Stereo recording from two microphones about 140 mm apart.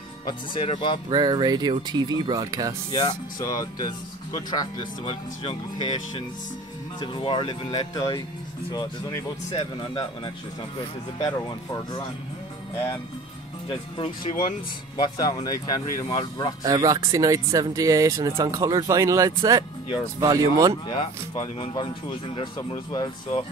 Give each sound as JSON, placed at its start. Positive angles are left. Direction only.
{"t": 0.2, "sound": "speech", "side_deg": 30}
{"t": 1.1, "sound": "speech", "side_deg": -30}
{"t": 2.9, "sound": "speech", "side_deg": 30}
{"t": 9.8, "sound": "speech", "side_deg": 35}
{"t": 13.7, "sound": "speech", "side_deg": 35}
{"t": 16.6, "sound": "speech", "side_deg": -25}
{"t": 20.9, "sound": "speech", "side_deg": 35}